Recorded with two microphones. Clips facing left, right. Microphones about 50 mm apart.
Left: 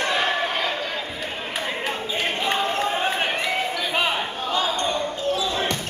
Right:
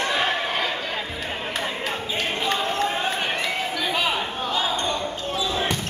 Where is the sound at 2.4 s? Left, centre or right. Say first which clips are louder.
Even; centre.